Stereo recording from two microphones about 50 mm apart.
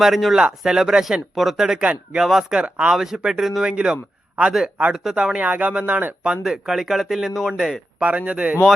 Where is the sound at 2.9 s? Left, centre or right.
Centre.